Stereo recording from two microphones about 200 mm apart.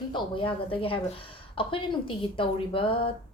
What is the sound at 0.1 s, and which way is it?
Speech, 25° left (ahead or behind).